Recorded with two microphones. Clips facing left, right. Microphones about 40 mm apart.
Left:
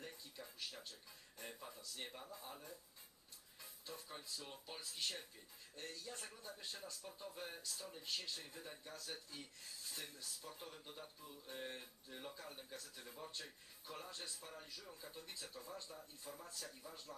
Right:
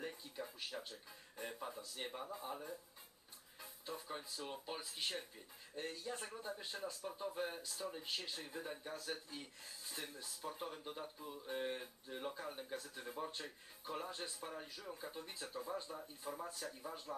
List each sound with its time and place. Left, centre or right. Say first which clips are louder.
0.0 s a sound: right 7 dB; right
1.4 s speech: right 7 dB; right
16.8 s speech: right 7 dB; right